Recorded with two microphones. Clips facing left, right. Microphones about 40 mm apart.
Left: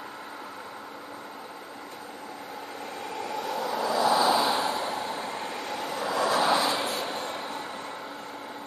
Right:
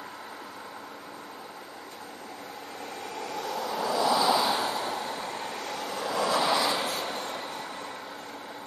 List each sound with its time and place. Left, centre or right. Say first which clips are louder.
3.2 s vehicle: left 2 dB; centre
3.9 s vehicle: left 1 dB; left; by 6.1 s centre
6.1 s vehicle: left 2 dB; left
6.9 s a sound: left 1 dB; left